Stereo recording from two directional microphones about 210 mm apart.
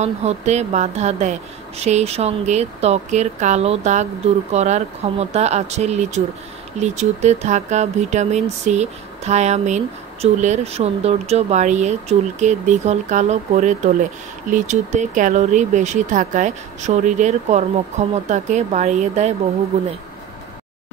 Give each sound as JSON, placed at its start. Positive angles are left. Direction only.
{"t": 0.0, "sound": "speech", "side_deg": -30}